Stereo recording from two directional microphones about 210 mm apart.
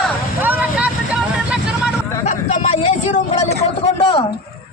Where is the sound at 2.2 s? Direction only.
35° left (ahead or behind).